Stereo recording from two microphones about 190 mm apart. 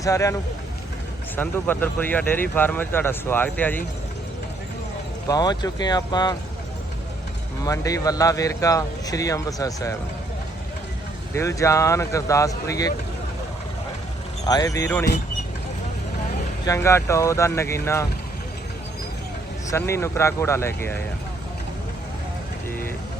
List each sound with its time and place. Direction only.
0.0 s speech: 15° left (ahead or behind)
1.4 s speech: 10° left (ahead or behind)
5.3 s speech: 20° left (ahead or behind)
7.6 s speech: 15° left (ahead or behind)
11.3 s speech: 15° left (ahead or behind)
14.4 s speech: 20° left (ahead or behind)
16.6 s speech: 15° left (ahead or behind)
19.7 s speech: 15° left (ahead or behind)